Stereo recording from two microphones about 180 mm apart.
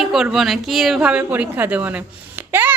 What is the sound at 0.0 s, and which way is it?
A woman's voice, centre (ahead or behind).